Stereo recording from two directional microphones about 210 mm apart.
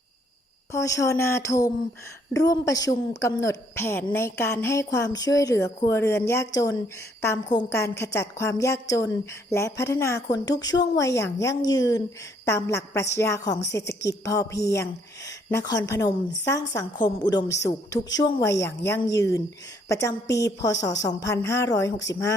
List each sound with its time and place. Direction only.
0.7 s a woman's voice: 15° left (ahead or behind)